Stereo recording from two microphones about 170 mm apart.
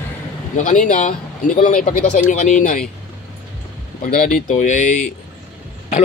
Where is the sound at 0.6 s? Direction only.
45° left (ahead or behind).